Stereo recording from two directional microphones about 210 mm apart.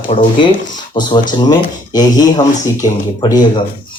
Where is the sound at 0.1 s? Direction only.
25° left (ahead or behind).